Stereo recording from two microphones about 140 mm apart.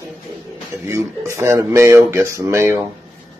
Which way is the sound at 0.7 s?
20° right (ahead or behind).